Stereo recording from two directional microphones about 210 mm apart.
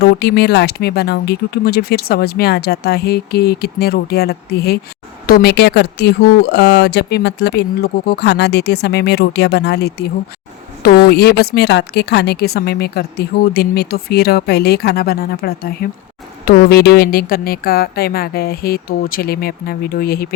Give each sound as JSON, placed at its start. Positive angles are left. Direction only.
{"t": 0.0, "sound": "speech", "side_deg": 50}